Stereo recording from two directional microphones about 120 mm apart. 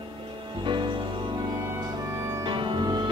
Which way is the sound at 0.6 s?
40° right (ahead or behind).